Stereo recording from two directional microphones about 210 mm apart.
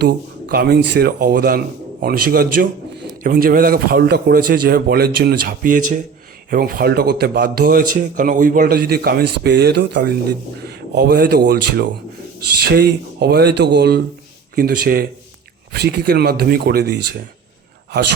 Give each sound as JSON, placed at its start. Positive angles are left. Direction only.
{"t": 0.0, "sound": "a man's voice", "side_deg": -50}